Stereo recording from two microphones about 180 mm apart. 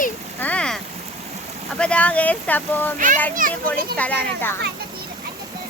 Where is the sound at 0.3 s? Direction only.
10° left (ahead or behind).